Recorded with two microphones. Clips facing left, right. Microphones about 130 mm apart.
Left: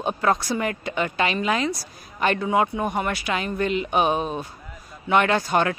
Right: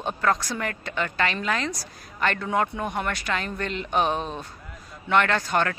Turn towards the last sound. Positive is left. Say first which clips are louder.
# left 3 dB
turn(degrees=15)  # may be behind; listen again after turning